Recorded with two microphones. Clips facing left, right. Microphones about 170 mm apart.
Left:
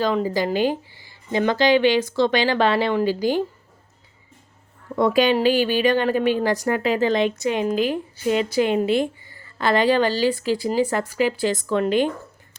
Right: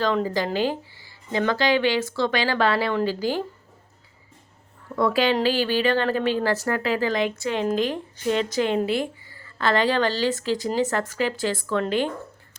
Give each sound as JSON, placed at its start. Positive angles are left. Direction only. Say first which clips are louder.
{"t": 0.0, "sound": "speech", "louder": "left 2 dB", "side_deg": 10}
{"t": 4.9, "sound": "speech", "louder": "left 3 dB", "side_deg": 20}